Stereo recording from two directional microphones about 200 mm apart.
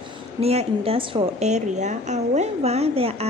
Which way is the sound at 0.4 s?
30° right (ahead or behind).